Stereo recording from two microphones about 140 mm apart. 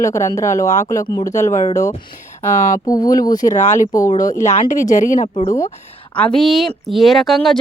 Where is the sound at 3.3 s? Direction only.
65° left (ahead or behind).